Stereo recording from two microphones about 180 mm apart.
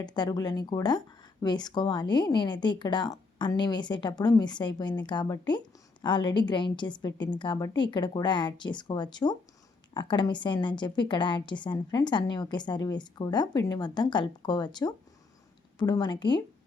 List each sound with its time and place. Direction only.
0.0 s speech: 20° left (ahead or behind)